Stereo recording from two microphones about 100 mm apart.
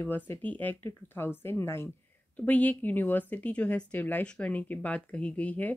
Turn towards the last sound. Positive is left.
turn(degrees=15)  # may be behind; listen again after turning